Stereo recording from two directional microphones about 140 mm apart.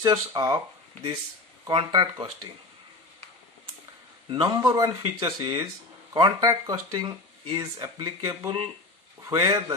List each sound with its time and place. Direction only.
0.0 s speech: 30° right (ahead or behind)
1.7 s speech: 35° right (ahead or behind)
4.3 s speech: 35° right (ahead or behind)
7.0 s speech: 35° right (ahead or behind)